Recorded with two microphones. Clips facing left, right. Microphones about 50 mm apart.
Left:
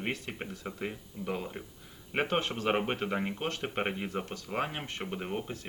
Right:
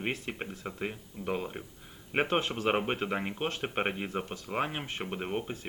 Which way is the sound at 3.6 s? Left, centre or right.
Right.